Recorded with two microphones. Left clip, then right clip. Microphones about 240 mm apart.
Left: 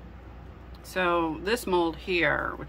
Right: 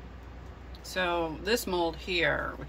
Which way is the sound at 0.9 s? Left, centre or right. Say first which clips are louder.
Left 4 dB; centre.